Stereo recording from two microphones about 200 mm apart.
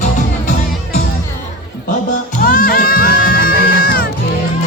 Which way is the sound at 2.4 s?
45° left (ahead or behind).